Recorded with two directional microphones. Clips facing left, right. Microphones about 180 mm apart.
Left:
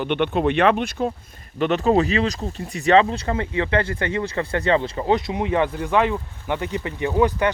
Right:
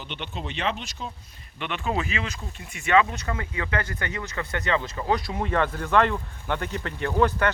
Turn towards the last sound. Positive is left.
turn(degrees=15)  # may be behind; listen again after turning